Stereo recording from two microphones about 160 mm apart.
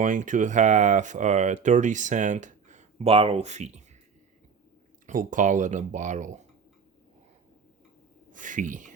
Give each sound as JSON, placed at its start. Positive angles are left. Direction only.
{"t": 0.0, "sound": "speech", "side_deg": -55}
{"t": 5.0, "sound": "speech", "side_deg": -55}
{"t": 8.3, "sound": "speech", "side_deg": -55}